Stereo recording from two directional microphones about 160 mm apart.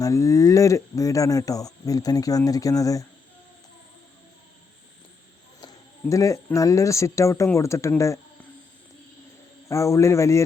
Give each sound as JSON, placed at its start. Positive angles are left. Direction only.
{"t": 0.0, "sound": "speech", "side_deg": 20}
{"t": 5.5, "sound": "speech", "side_deg": 25}
{"t": 9.6, "sound": "speech", "side_deg": 20}